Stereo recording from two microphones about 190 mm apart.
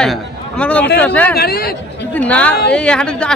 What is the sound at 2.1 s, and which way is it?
A man's voice, 5° left (ahead or behind).